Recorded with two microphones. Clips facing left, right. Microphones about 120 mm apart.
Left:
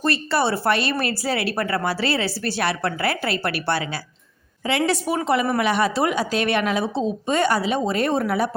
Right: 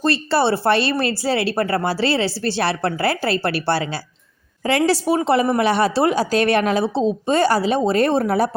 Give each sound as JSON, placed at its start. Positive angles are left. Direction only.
{"t": 0.0, "sound": "a woman's voice", "side_deg": -30}